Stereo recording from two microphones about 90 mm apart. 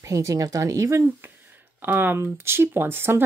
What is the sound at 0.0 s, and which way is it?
Speech, 35° right (ahead or behind).